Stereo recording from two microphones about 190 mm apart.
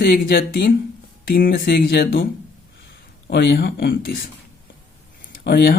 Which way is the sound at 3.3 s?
60° left (ahead or behind).